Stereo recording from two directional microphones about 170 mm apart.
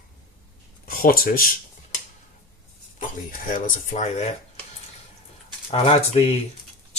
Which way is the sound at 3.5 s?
45° left (ahead or behind).